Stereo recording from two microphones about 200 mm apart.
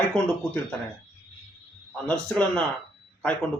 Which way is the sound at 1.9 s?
5° left (ahead or behind).